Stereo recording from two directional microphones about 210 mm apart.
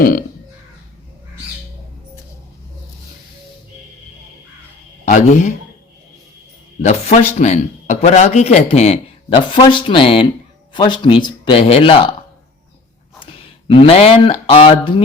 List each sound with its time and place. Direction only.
0.0 s speech: 45° left (ahead or behind)
5.0 s a man's voice: 35° left (ahead or behind)
6.8 s speech: 30° left (ahead or behind)
13.1 s speech: 25° left (ahead or behind)